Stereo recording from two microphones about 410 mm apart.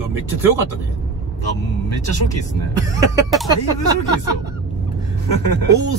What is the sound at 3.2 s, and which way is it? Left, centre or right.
Speech, centre.